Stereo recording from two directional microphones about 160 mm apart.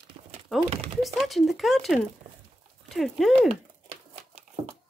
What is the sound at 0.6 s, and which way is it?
Speech, 40° right (ahead or behind).